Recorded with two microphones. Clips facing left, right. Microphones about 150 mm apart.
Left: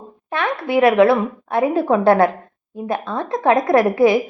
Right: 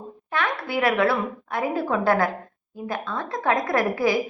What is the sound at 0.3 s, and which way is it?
A woman's voice, 25° left (ahead or behind).